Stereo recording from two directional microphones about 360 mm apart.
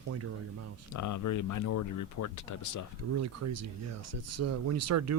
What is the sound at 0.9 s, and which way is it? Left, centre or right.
Speech, left.